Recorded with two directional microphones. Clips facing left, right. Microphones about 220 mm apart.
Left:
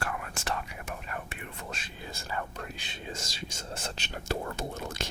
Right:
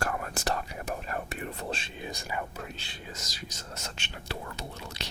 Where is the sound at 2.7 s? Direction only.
20° left (ahead or behind).